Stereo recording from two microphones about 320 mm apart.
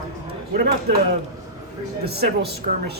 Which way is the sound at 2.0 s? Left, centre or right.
Right.